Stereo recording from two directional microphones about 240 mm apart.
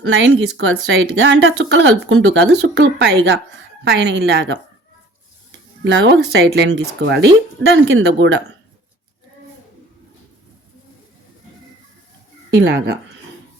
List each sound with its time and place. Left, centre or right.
0.0 s speech: right
12.5 s speech: right